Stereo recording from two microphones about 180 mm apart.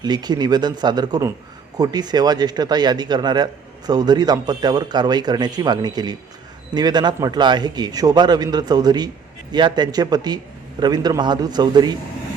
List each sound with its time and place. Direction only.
0.0 s a man's voice: 25° right (ahead or behind)